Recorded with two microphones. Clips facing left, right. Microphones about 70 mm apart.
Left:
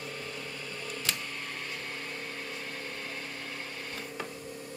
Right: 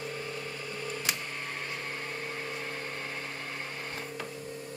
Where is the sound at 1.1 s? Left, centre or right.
Centre.